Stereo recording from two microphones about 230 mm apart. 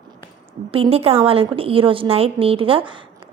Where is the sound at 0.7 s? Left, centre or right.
Right.